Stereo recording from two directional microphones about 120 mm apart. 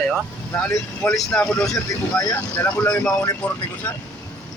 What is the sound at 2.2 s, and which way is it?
Speech, 20° left (ahead or behind).